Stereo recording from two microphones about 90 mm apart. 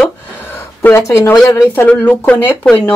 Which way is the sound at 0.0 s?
20° left (ahead or behind).